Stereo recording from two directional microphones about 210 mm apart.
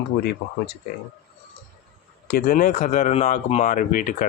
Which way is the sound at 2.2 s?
45° left (ahead or behind).